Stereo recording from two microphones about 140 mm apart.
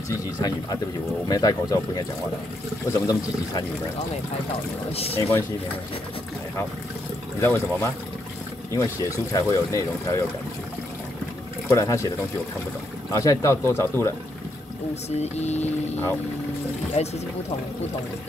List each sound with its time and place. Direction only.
1.3 s speech: 25° left (ahead or behind)
2.9 s speech: 25° left (ahead or behind)
4.9 s speech: 45° left (ahead or behind)
7.3 s speech: 20° left (ahead or behind)
11.7 s speech: 20° left (ahead or behind)
13.1 s speech: 25° left (ahead or behind)
15.0 s speech: 50° left (ahead or behind)